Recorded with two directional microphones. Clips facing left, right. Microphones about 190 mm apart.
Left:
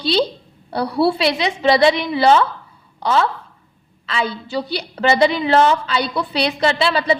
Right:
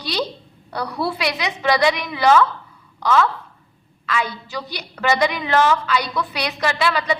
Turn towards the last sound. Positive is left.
turn(degrees=30)  # may be behind; listen again after turning